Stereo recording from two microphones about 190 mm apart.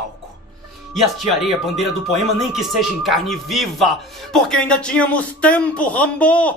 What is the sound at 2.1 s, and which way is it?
Speech, centre (ahead or behind).